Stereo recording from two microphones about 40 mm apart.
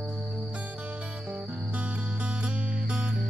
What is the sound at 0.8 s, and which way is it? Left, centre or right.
Music, right.